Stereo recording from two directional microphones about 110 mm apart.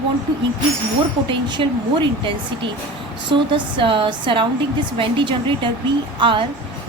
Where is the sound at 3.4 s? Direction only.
50° right (ahead or behind).